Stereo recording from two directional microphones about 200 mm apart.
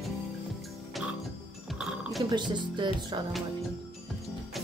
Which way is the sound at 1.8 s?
Centre (ahead or behind).